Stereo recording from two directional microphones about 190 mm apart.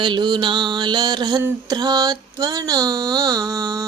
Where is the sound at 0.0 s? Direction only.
25° right (ahead or behind).